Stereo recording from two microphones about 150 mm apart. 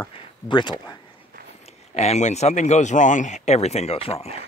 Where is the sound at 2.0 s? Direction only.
50° left (ahead or behind).